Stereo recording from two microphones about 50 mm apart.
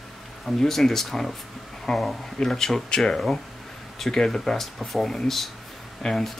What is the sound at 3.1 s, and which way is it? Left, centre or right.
Speech, centre.